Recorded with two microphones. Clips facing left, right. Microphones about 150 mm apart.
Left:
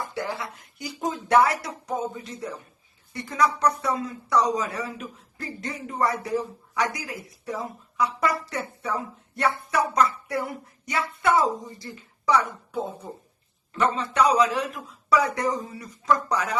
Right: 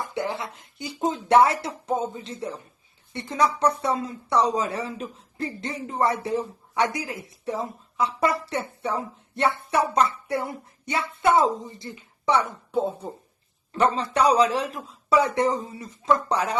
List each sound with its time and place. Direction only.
0.0 s speech: 20° right (ahead or behind)
13.7 s a man's voice: 35° right (ahead or behind)